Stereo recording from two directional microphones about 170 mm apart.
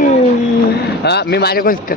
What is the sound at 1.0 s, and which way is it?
Speech, 75° left (ahead or behind).